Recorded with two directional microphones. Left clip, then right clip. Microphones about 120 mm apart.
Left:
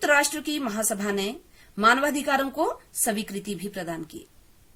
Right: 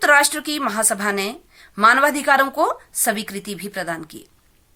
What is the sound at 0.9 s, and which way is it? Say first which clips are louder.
Speech: right 6 dB; 40° left (ahead or behind).